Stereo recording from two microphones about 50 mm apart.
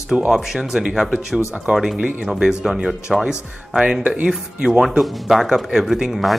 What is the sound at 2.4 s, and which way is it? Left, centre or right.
Speech, centre.